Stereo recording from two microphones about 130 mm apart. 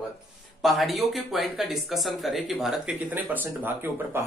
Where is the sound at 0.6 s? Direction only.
Centre (ahead or behind).